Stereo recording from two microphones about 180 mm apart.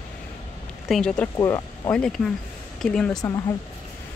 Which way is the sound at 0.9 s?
5° left (ahead or behind).